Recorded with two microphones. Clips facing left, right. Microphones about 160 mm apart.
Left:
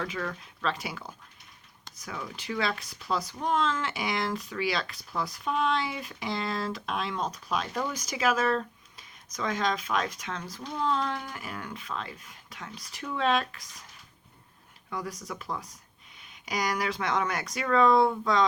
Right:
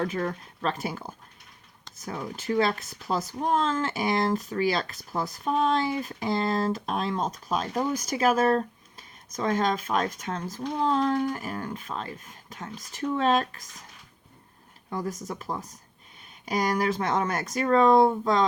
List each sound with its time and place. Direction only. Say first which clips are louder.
0.0 s speech: right 5 dB; 40° right (ahead or behind)
2.0 s speech: right 4 dB; 30° right (ahead or behind)
2.3 s speech: right 7 dB; 45° right (ahead or behind)
7.7 s speech: right 5 dB; 25° right (ahead or behind)
7.9 s speech: right 4 dB; 50° right (ahead or behind)
16.2 s speech: right 4 dB; 45° right (ahead or behind)